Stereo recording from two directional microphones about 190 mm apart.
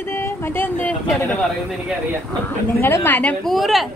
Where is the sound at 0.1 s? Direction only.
10° left (ahead or behind).